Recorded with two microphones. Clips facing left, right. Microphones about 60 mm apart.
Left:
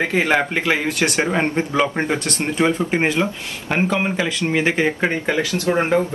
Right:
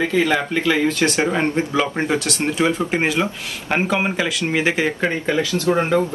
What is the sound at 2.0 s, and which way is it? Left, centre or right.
Speech, left.